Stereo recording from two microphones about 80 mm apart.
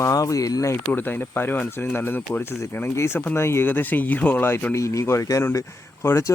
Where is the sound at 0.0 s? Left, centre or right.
Left.